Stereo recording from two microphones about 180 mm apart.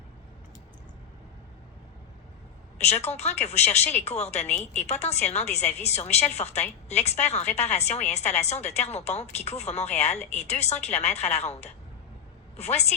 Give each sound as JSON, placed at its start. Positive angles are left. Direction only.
{"t": 2.7, "sound": "a woman's voice", "side_deg": 35}